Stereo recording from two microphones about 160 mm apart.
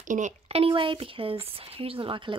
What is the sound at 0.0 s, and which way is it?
Speech, 50° right (ahead or behind).